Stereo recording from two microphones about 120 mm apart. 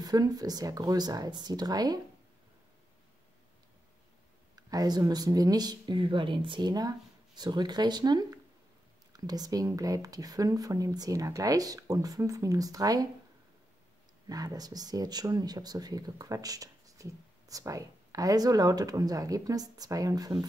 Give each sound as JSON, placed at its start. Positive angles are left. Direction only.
{"t": 0.0, "sound": "speech", "side_deg": -30}
{"t": 4.6, "sound": "speech", "side_deg": -30}
{"t": 14.2, "sound": "speech", "side_deg": -30}